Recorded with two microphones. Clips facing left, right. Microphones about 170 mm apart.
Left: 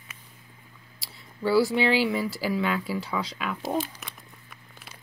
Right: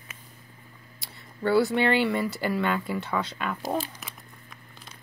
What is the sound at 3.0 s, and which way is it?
Speech, 60° right (ahead or behind).